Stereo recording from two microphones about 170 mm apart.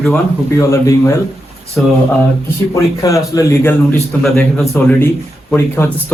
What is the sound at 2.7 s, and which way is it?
A man's voice, 20° left (ahead or behind).